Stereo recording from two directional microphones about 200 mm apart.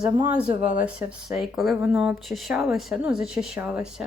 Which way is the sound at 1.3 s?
Centre (ahead or behind).